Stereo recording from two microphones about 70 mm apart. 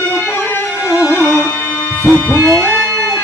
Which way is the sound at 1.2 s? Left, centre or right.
Left.